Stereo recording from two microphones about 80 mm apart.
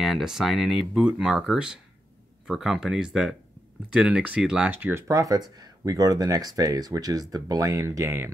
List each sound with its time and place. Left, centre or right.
0.0 s speech: centre
4.6 s speech: right
5.0 s speech: right